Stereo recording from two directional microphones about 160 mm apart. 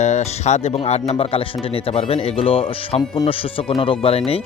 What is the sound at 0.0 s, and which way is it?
Speech, 45° left (ahead or behind).